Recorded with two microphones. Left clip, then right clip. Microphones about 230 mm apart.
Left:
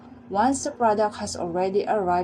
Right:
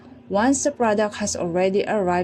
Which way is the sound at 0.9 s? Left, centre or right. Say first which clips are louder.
Right 1 dB; right.